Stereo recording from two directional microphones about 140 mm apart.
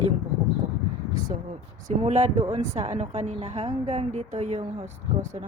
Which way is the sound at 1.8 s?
50° right (ahead or behind).